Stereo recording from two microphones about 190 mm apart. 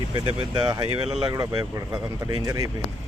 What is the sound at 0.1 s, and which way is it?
Speech, 25° right (ahead or behind).